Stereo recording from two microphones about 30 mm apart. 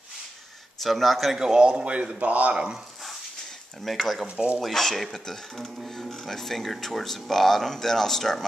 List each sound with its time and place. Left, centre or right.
0.7 s speech: centre
1.4 s speech: right
2.2 s speech: right
3.8 s speech: centre